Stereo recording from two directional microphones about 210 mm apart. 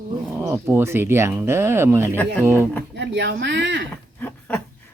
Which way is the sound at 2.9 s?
55° right (ahead or behind).